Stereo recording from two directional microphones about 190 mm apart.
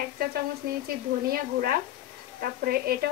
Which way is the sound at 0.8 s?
50° right (ahead or behind).